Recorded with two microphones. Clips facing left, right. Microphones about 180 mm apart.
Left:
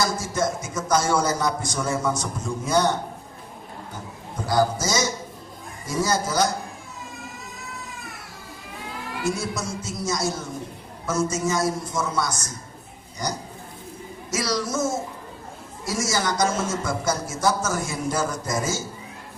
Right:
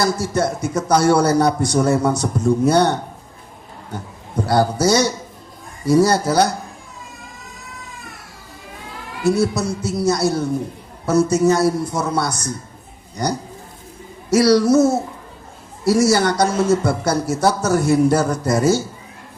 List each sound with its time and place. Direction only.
0.0 s a man's voice: 65° right (ahead or behind)
4.4 s a man's voice: 65° right (ahead or behind)
9.2 s a man's voice: 65° right (ahead or behind)